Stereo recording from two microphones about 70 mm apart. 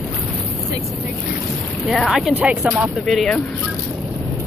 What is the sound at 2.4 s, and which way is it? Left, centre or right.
Speech, centre.